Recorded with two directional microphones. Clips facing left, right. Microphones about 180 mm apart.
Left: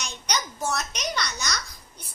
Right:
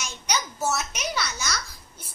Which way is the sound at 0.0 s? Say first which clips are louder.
Right 1 dB; 5° right (ahead or behind).